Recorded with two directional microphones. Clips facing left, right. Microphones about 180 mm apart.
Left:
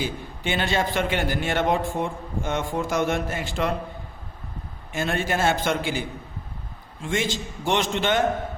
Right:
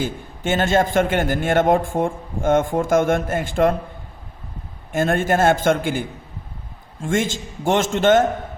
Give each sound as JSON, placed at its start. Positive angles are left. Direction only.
{"t": 0.0, "sound": "a man's voice", "side_deg": -45}
{"t": 4.9, "sound": "a man's voice", "side_deg": -50}